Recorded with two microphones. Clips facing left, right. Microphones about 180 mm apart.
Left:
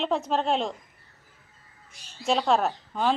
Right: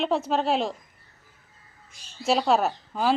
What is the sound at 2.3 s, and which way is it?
Speech, 5° right (ahead or behind).